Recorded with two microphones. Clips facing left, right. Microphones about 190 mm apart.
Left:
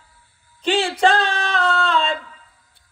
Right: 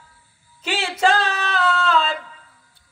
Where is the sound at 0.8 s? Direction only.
30° left (ahead or behind).